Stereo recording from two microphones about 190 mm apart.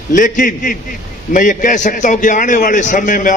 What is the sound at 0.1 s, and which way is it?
A man's voice, 45° left (ahead or behind).